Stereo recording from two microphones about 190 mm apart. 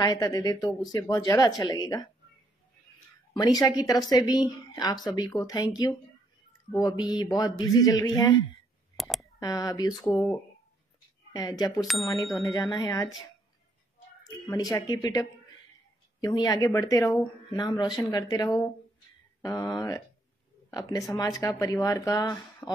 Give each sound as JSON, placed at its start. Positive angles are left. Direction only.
{"t": 0.0, "sound": "a woman's voice", "side_deg": 20}
{"t": 3.3, "sound": "a woman's voice", "side_deg": 20}
{"t": 6.7, "sound": "a woman's voice", "side_deg": 20}
{"t": 8.9, "sound": "a sound", "side_deg": 0}
{"t": 9.2, "sound": "speech", "side_deg": 20}
{"t": 9.9, "sound": "speech", "side_deg": 0}
{"t": 11.3, "sound": "a woman's voice", "side_deg": 20}
{"t": 12.2, "sound": "speech", "side_deg": 0}
{"t": 12.7, "sound": "a woman's voice", "side_deg": 20}
{"t": 14.7, "sound": "a woman's voice", "side_deg": 20}
{"t": 17.6, "sound": "a woman's voice", "side_deg": 20}